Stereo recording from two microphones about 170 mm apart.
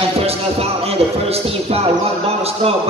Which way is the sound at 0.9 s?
35° right (ahead or behind).